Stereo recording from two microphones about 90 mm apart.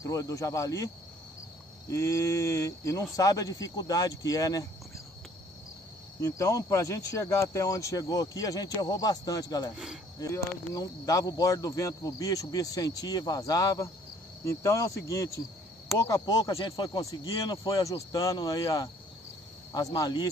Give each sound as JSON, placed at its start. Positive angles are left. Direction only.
{"t": 0.0, "sound": "speech", "side_deg": 35}
{"t": 1.9, "sound": "speech", "side_deg": 35}
{"t": 6.2, "sound": "speech", "side_deg": 35}
{"t": 10.7, "sound": "speech", "side_deg": 40}
{"t": 16.5, "sound": "speech", "side_deg": 60}
{"t": 17.0, "sound": "speech", "side_deg": 40}
{"t": 19.9, "sound": "speech", "side_deg": 50}